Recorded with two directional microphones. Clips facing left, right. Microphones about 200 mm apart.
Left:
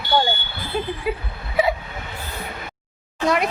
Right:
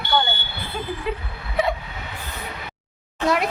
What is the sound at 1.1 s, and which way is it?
Speech, 10° left (ahead or behind).